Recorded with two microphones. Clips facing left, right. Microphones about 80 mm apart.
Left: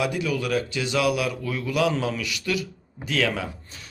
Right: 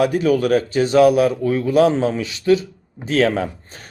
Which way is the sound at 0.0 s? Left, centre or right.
Right.